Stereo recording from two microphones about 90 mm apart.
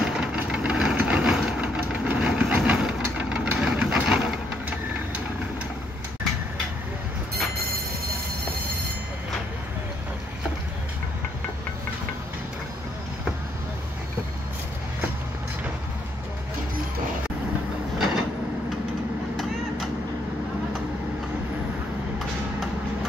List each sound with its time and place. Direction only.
0.0 s vehicle: 10° right (ahead or behind)
1.6 s vehicle: 15° right (ahead or behind)
2.1 s engine: 10° right (ahead or behind)
17.9 s train: 5° right (ahead or behind)